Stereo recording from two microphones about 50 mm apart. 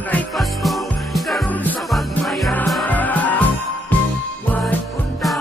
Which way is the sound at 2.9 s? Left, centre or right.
Left.